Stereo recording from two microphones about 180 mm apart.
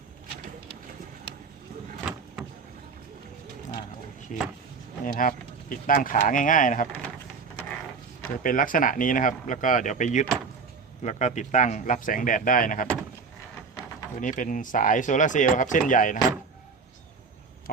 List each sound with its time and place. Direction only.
4.3 s speech: 45° left (ahead or behind)
8.4 s speech: 50° left (ahead or behind)
14.2 s speech: 45° left (ahead or behind)